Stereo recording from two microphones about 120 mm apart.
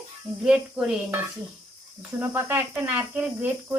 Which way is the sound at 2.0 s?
10° right (ahead or behind).